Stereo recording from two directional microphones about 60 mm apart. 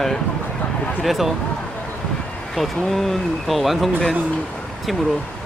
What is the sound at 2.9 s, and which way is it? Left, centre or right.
Speech, centre.